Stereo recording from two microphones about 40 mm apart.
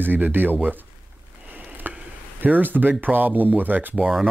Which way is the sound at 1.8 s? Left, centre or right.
Right.